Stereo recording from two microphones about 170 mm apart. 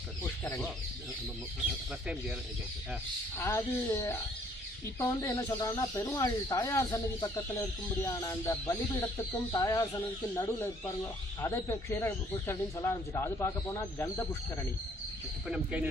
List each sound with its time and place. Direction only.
3.3 s speech: 15° left (ahead or behind)
15.4 s speech: 5° right (ahead or behind)